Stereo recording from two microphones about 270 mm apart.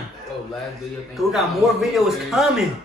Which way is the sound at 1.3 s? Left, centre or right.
Centre.